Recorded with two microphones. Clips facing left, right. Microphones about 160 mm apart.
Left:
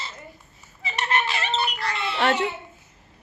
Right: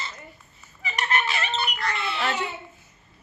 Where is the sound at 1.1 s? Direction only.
30° left (ahead or behind).